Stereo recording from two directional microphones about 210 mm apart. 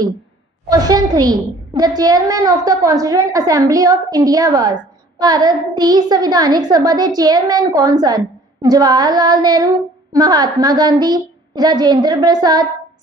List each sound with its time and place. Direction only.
0.7 s a child's voice: 20° right (ahead or behind)